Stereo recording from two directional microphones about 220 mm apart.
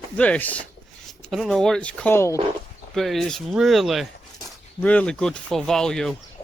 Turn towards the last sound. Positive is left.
turn(degrees=5)  # may be behind; listen again after turning